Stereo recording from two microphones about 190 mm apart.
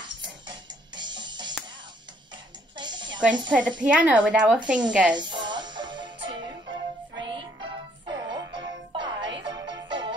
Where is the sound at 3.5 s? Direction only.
5° right (ahead or behind).